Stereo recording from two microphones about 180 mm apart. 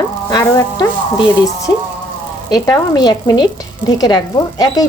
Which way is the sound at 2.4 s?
20° left (ahead or behind).